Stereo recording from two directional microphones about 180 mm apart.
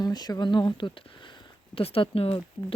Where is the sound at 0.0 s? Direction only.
20° left (ahead or behind).